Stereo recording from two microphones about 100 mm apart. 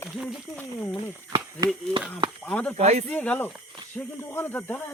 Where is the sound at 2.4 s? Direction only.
15° left (ahead or behind).